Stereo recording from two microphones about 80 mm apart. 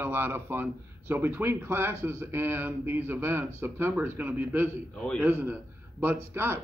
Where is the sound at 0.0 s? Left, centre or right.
Right.